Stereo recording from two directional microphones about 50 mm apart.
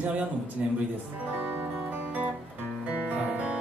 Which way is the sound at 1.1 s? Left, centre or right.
Right.